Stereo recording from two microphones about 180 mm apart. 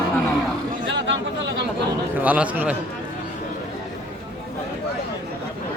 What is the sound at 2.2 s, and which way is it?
Speech, 10° right (ahead or behind).